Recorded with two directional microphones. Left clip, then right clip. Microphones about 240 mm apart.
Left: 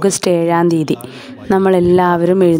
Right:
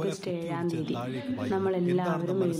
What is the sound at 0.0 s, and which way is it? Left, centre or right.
A woman's voice, left.